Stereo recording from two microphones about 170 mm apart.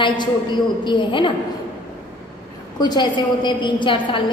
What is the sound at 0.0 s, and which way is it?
A woman's voice, 25° left (ahead or behind).